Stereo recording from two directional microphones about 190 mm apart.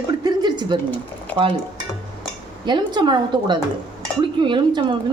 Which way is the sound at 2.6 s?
25° right (ahead or behind).